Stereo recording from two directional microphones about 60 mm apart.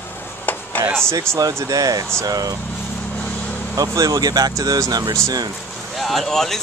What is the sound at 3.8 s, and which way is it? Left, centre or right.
Speech, right.